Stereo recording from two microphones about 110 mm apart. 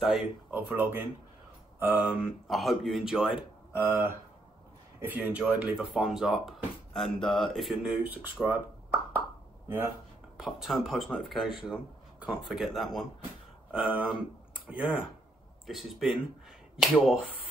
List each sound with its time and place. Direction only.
0.0 s speech: 10° right (ahead or behind)
2.0 s speech: 5° right (ahead or behind)
3.7 s speech: 20° right (ahead or behind); by 8.1 s 5° right (ahead or behind)
8.1 s speech: 15° right (ahead or behind)
10.3 s speech: 5° right (ahead or behind)
15.6 s speech: centre (ahead or behind)